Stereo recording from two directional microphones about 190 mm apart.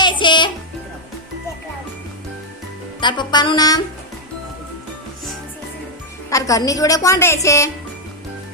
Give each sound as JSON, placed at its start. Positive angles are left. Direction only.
{"t": 0.0, "sound": "music", "side_deg": 25}
{"t": 3.0, "sound": "music", "side_deg": 25}
{"t": 6.3, "sound": "a woman's voice", "side_deg": 15}